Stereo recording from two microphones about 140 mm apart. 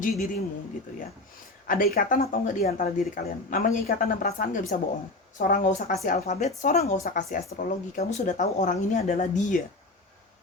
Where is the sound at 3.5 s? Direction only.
90° left; by 7.0 s 55° left (ahead or behind).